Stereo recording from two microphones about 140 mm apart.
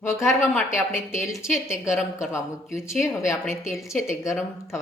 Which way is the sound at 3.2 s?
20° left (ahead or behind).